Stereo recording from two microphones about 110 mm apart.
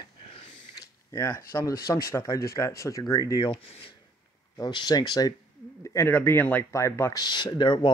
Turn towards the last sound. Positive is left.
turn(degrees=45)  # may be behind; listen again after turning